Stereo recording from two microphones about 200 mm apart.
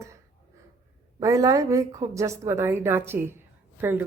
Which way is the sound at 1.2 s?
15° right (ahead or behind).